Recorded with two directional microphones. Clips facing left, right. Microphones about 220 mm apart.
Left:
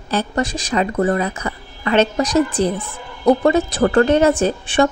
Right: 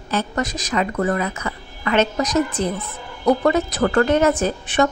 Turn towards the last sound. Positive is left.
turn(degrees=30)  # may be behind; listen again after turning